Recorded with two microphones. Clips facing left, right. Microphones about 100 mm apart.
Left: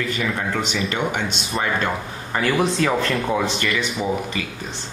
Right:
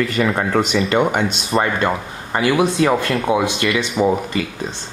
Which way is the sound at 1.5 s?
35° right (ahead or behind).